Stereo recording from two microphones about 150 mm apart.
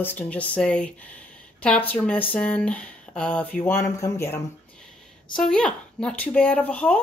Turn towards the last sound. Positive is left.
turn(degrees=10)  # may be behind; listen again after turning